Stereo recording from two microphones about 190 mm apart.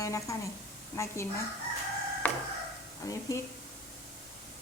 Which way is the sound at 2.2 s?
10° left (ahead or behind).